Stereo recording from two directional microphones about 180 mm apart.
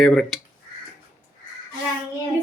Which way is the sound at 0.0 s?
5° left (ahead or behind).